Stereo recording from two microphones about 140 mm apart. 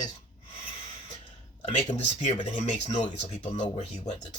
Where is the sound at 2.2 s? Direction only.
55° left (ahead or behind).